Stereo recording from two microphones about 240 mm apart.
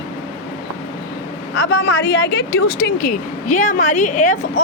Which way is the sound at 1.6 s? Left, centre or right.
Left.